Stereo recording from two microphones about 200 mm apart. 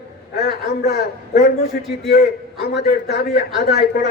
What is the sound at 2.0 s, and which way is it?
A man's voice, 55° left (ahead or behind).